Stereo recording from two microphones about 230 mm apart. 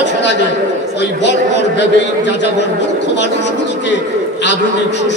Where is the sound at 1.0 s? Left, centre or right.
Left.